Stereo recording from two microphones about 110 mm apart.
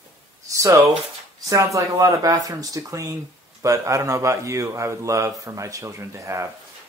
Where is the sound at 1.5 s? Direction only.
30° right (ahead or behind).